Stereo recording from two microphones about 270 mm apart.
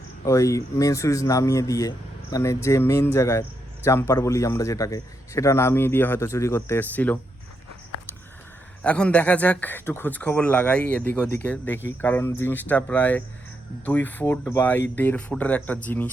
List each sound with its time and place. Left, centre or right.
0.3 s a man's voice: centre
8.8 s a man's voice: centre